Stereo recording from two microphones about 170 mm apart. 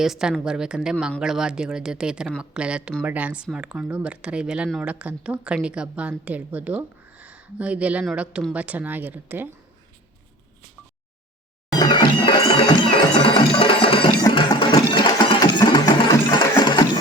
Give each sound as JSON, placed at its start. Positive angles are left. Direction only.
{"t": 0.0, "sound": "a woman's voice", "side_deg": -5}
{"t": 11.7, "sound": "music", "side_deg": 25}
{"t": 16.4, "sound": "a sound", "side_deg": 25}